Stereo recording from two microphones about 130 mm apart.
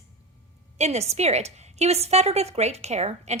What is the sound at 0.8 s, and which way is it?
A woman's voice, 55° right (ahead or behind).